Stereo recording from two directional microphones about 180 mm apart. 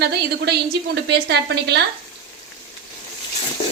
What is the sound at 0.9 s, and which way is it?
Speech, 65° right (ahead or behind).